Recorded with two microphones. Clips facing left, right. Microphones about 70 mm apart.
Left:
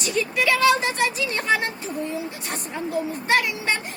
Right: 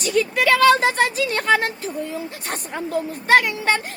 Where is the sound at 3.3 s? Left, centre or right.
Right.